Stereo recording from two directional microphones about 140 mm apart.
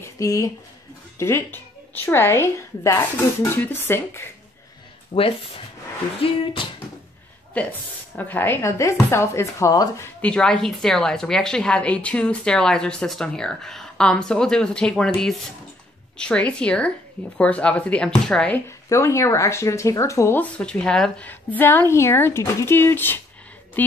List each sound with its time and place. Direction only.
0.0 s a sound: 25° left (ahead or behind)
1.1 s speech: 20° left (ahead or behind)
6.2 s speech: 40° left (ahead or behind)
7.5 s speech: 10° left (ahead or behind)
10.2 s a woman's voice: 5° left (ahead or behind)
18.9 s speech: 20° left (ahead or behind)